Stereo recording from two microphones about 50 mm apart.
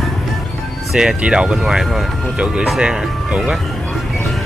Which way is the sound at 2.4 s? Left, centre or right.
Centre.